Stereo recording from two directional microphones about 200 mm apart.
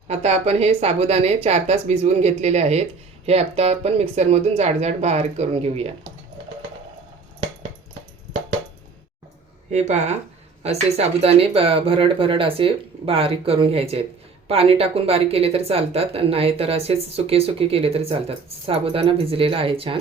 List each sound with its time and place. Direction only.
0.1 s a woman's voice: 35° right (ahead or behind)
9.7 s a woman's voice: 35° right (ahead or behind)